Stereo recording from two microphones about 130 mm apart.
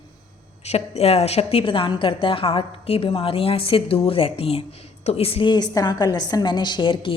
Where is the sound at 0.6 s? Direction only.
55° left (ahead or behind).